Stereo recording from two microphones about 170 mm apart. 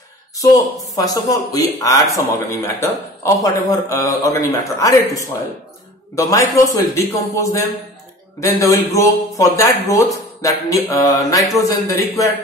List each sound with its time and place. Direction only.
0.4 s speech: 20° left (ahead or behind)